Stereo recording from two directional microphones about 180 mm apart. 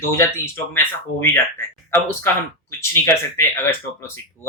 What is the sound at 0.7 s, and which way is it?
Speech, 15° left (ahead or behind).